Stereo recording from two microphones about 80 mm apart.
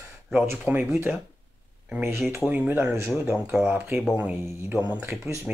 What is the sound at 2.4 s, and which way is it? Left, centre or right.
Speech, centre.